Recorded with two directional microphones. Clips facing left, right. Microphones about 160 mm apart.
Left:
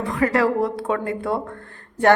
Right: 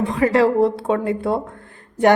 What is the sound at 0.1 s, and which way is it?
Speech, 25° right (ahead or behind).